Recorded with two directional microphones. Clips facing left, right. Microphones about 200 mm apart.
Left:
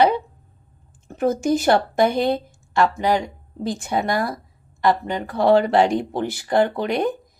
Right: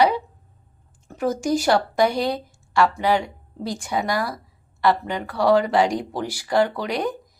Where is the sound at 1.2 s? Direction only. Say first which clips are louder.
Left 2 dB; 20° left (ahead or behind).